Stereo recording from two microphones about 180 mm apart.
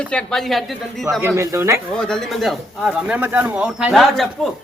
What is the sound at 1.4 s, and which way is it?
Speech, 15° right (ahead or behind).